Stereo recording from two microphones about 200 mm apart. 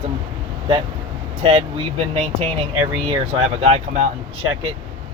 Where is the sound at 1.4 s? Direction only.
30° right (ahead or behind).